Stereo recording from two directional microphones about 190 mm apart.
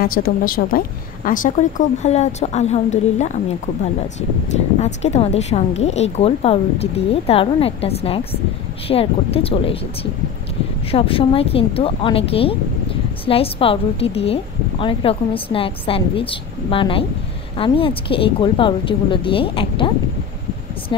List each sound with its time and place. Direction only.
0.0 s a woman's voice: 50° left (ahead or behind)
4.7 s a woman's voice: 35° left (ahead or behind)
10.9 s speech: 30° left (ahead or behind)